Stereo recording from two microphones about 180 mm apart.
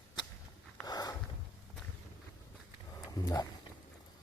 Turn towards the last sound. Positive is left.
turn(degrees=20)  # may be behind; listen again after turning